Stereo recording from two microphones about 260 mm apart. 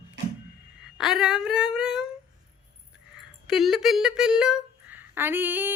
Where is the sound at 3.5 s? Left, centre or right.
Centre.